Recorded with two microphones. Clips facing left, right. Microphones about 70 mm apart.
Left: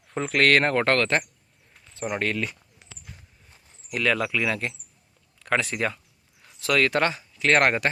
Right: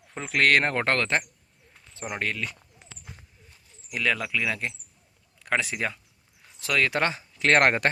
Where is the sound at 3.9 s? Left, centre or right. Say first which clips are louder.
Left 3 dB; centre.